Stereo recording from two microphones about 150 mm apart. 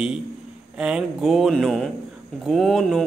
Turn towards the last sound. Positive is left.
turn(degrees=0)  # may be behind; listen again after turning